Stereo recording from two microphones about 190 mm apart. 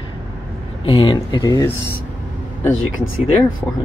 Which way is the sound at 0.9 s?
25° left (ahead or behind).